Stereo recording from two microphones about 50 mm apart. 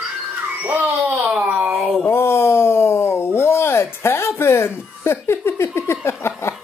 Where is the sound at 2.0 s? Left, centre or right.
Left.